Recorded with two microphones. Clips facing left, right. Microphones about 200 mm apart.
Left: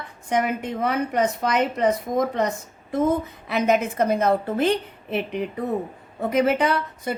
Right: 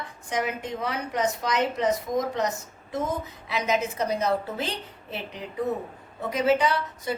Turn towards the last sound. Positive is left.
turn(degrees=55)  # may be behind; listen again after turning